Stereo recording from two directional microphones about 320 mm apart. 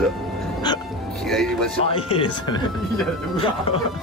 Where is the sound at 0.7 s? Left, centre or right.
Centre.